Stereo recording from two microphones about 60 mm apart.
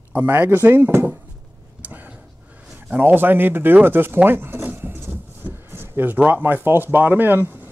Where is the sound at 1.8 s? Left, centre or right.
Right.